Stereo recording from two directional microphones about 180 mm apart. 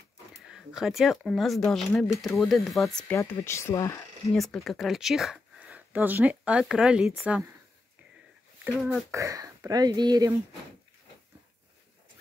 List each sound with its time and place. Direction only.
0.5 s speech: 5° right (ahead or behind)
3.2 s speech: 15° left (ahead or behind)
4.3 s speech: centre (ahead or behind)
9.1 s speech: 15° right (ahead or behind)